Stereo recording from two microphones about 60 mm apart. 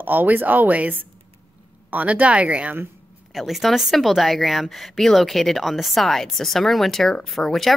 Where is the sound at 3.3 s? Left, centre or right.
Centre.